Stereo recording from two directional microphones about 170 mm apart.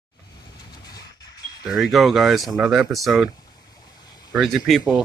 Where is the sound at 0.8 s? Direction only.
20° left (ahead or behind).